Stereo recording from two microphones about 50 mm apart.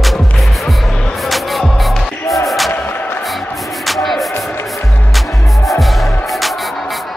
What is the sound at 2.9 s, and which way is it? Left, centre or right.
Music, left.